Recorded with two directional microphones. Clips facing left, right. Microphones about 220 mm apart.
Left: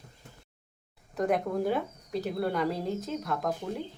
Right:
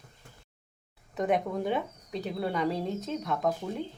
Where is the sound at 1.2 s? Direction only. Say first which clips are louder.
Left 1 dB; centre (ahead or behind).